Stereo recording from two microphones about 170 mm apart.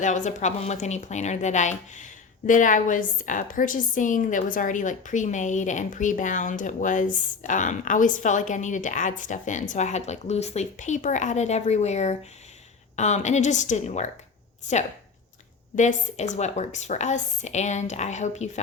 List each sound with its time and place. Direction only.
0.0 s a woman's voice: 45° left (ahead or behind)
15.7 s a woman's voice: 45° left (ahead or behind)